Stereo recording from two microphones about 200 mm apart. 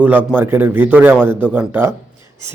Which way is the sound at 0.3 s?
10° right (ahead or behind).